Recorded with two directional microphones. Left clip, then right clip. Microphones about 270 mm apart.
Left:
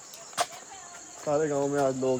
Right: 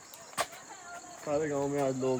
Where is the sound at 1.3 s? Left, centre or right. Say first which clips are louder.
Left 5 dB; centre.